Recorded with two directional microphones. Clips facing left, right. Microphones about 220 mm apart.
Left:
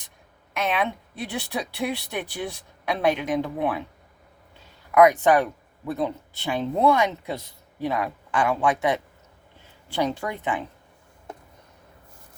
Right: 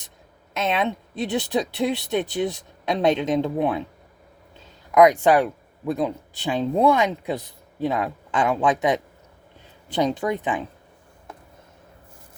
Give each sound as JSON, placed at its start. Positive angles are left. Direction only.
{"t": 0.5, "sound": "speech", "side_deg": -25}
{"t": 4.9, "sound": "speech", "side_deg": -15}